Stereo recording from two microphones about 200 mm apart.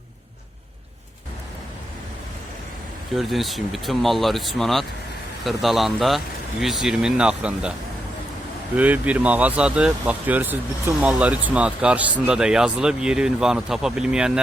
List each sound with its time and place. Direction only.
3.2 s speech: centre (ahead or behind)
8.7 s speech: 5° right (ahead or behind)